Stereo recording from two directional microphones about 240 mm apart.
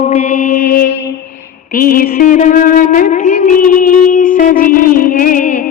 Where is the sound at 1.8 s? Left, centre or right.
Left.